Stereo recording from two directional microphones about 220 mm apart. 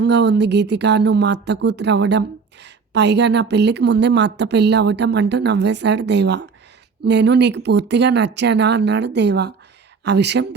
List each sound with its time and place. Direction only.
0.0 s speech: 50° right (ahead or behind)